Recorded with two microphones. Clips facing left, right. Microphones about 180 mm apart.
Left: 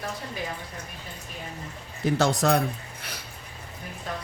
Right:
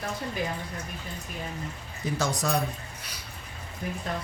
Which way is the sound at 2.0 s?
65° left (ahead or behind).